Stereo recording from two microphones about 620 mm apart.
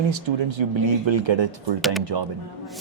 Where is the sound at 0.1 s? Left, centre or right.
Right.